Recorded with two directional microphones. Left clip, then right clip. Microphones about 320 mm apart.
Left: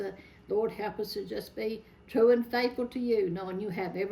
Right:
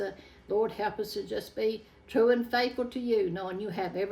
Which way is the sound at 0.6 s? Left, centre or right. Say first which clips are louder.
Right 2 dB; centre.